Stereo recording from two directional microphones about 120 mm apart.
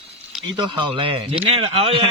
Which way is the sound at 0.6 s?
45° right (ahead or behind).